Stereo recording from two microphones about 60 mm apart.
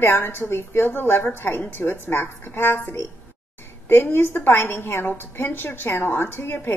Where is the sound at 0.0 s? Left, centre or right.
Left.